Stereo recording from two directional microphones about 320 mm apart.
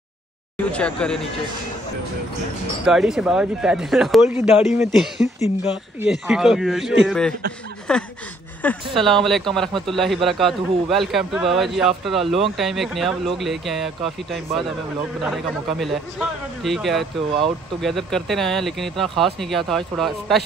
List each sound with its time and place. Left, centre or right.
0.7 s speech: centre
2.9 s speech: centre
5.2 s speech: left
5.9 s speech: centre
15.8 s speech: centre